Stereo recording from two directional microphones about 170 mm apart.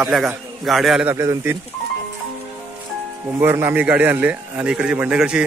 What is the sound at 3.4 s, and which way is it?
A man's voice, 15° right (ahead or behind).